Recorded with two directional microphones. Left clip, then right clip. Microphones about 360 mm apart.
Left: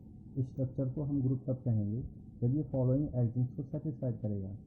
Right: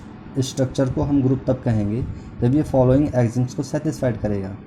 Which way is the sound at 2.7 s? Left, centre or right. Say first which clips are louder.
Right 19 dB; centre.